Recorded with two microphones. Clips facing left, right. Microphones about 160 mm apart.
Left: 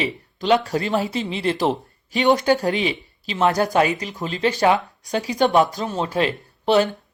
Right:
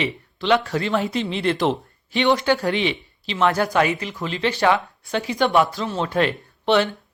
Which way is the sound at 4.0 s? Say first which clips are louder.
Left 2 dB; 40° left (ahead or behind).